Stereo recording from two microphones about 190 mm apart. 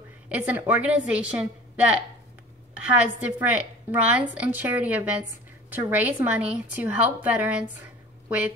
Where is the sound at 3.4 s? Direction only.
10° right (ahead or behind).